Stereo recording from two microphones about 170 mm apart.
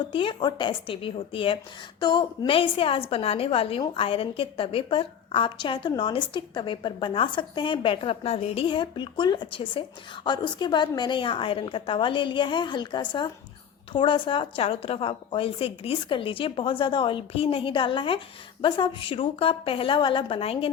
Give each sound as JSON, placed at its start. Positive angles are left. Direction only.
{"t": 0.0, "sound": "a woman's voice", "side_deg": 30}